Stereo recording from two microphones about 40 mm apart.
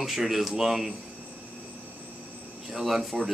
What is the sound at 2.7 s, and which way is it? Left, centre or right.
Speech, centre.